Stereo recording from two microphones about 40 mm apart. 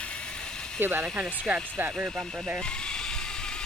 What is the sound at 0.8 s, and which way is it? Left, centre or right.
Speech, right.